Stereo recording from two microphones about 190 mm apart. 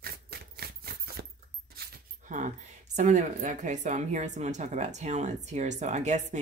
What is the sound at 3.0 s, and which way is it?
Speech, 40° right (ahead or behind).